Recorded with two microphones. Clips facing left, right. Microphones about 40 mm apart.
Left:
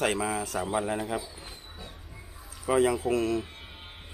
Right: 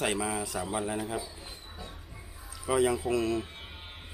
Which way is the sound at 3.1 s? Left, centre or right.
Left.